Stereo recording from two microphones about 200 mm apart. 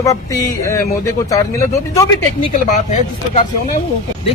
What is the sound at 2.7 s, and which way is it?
Speech, 35° left (ahead or behind).